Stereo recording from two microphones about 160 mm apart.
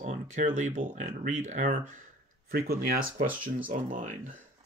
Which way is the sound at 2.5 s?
70° right (ahead or behind).